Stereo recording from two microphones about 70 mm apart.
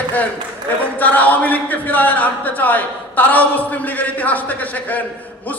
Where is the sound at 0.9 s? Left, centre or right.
Left.